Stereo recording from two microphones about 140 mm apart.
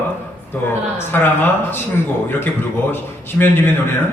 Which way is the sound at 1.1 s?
15° left (ahead or behind).